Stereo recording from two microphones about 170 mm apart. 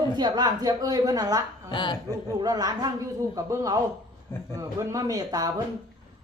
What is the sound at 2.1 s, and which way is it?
Speech, 20° right (ahead or behind).